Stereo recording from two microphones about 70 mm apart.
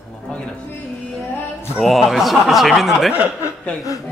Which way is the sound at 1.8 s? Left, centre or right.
Centre.